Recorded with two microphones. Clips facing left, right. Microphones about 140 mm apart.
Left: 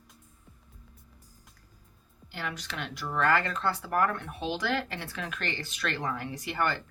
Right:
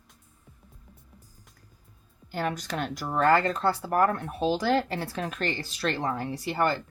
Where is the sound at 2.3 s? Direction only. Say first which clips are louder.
Right 8 dB; 40° right (ahead or behind).